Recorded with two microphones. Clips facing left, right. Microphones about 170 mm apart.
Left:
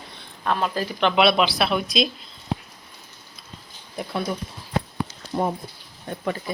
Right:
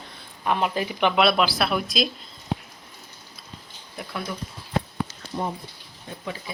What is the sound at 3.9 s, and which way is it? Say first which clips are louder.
Speech: left 5 dB; 25° left (ahead or behind).